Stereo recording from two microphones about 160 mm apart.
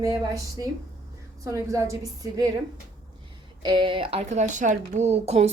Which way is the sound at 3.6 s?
30° right (ahead or behind).